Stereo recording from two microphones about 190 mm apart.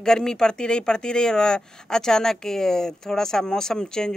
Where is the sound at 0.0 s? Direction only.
5° left (ahead or behind).